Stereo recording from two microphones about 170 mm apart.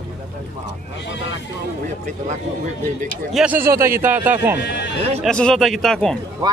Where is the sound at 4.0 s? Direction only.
10° right (ahead or behind).